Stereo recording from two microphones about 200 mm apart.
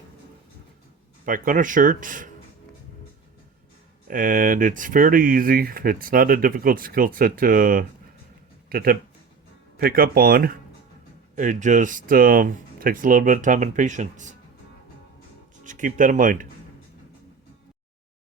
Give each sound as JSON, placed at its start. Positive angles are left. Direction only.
{"t": 1.2, "sound": "speech", "side_deg": -40}
{"t": 4.1, "sound": "speech", "side_deg": -45}
{"t": 15.6, "sound": "speech", "side_deg": -40}